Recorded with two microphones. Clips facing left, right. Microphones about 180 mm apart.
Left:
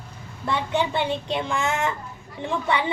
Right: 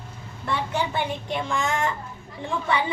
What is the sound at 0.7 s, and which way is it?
Speech, 20° left (ahead or behind).